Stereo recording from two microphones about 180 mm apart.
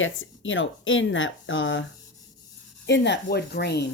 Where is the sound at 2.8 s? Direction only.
75° left (ahead or behind).